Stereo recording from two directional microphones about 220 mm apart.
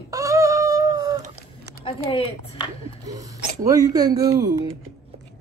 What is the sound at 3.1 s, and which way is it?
Speech, 15° right (ahead or behind).